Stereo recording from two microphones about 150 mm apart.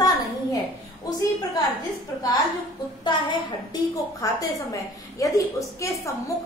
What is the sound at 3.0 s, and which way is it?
A woman's voice, 30° left (ahead or behind).